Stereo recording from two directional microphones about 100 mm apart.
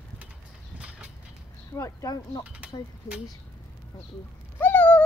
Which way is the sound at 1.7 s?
30° left (ahead or behind).